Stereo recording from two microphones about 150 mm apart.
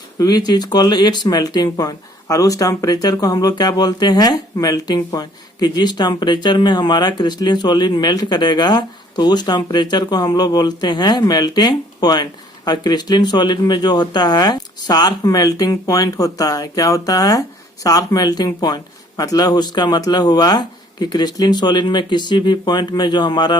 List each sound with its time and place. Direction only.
0.2 s speech: 25° left (ahead or behind)